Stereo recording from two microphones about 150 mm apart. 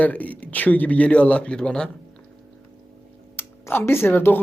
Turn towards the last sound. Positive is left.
turn(degrees=15)  # may be behind; listen again after turning